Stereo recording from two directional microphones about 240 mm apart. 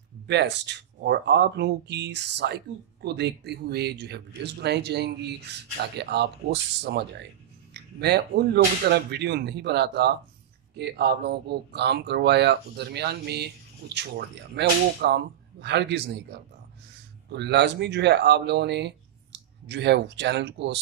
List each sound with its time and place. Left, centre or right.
0.3 s speech: right